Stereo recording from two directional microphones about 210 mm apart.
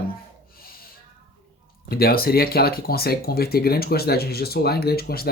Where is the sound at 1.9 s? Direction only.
45° left (ahead or behind).